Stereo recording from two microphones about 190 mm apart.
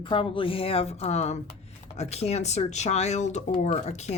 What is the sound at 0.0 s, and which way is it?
Speech, 25° left (ahead or behind).